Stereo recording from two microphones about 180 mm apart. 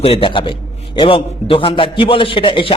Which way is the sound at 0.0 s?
30° left (ahead or behind).